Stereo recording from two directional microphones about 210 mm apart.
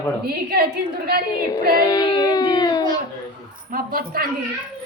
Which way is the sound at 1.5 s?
20° left (ahead or behind).